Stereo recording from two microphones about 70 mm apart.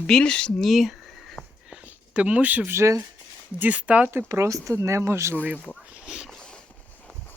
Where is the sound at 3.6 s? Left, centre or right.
Centre.